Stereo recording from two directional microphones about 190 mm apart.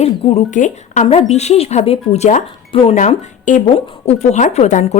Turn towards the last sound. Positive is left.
turn(degrees=40)  # may be behind; listen again after turning